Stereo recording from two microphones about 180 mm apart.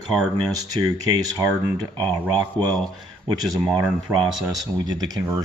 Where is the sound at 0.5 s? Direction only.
20° right (ahead or behind).